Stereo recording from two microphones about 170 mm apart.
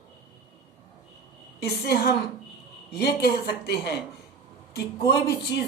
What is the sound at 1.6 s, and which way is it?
Speech, 70° left (ahead or behind).